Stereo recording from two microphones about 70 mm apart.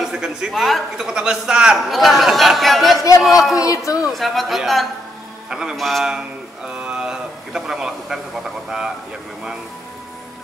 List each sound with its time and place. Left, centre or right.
0.0 s a man's voice: centre
1.9 s speech: centre
3.5 s speech: left
4.1 s speech: centre
5.5 s a man's voice: centre
5.8 s speech: centre
6.8 s a man's voice: centre